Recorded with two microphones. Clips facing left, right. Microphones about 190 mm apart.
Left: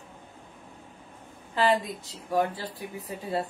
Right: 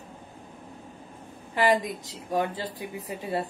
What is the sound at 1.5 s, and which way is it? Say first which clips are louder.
Speech: right 1 dB; 15° right (ahead or behind).